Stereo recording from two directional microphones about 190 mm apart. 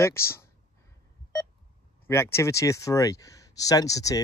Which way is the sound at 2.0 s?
15° left (ahead or behind).